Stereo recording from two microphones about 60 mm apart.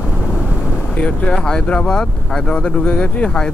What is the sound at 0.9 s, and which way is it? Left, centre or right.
Speech, left.